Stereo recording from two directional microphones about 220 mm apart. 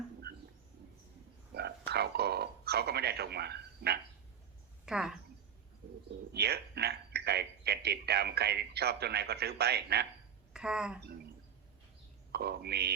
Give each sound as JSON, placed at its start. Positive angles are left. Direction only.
{"t": 0.3, "sound": "a sound", "side_deg": -45}
{"t": 1.5, "sound": "a sound", "side_deg": -50}
{"t": 4.9, "sound": "speech", "side_deg": -5}
{"t": 6.3, "sound": "speech", "side_deg": -45}
{"t": 10.5, "sound": "speech", "side_deg": -5}
{"t": 12.3, "sound": "speech", "side_deg": -45}